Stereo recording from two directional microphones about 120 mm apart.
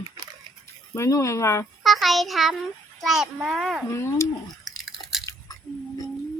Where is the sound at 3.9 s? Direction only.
20° left (ahead or behind).